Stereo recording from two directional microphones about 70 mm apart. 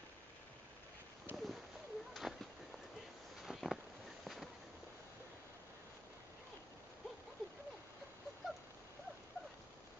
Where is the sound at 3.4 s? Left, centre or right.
Centre.